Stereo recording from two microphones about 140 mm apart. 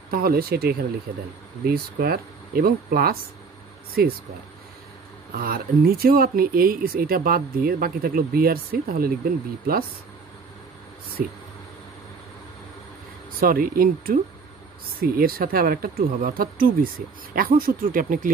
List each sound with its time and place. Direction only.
0.1 s speech: 90° right
5.3 s speech: 90° right
13.4 s speech: 90° right